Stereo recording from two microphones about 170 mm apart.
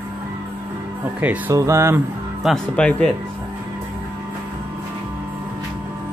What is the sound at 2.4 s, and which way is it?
Speech, 5° left (ahead or behind).